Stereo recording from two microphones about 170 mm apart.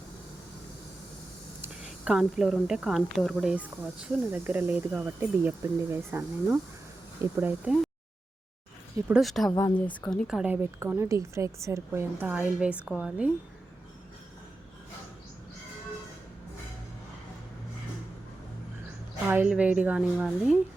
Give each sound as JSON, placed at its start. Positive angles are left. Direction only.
{"t": 1.6, "sound": "a woman's voice", "side_deg": -5}
{"t": 9.0, "sound": "speech", "side_deg": 0}
{"t": 9.5, "sound": "speech", "side_deg": 20}
{"t": 9.7, "sound": "a woman's voice", "side_deg": 10}
{"t": 19.3, "sound": "a woman's voice", "side_deg": -10}